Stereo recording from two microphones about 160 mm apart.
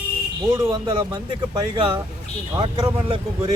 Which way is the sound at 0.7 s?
30° right (ahead or behind).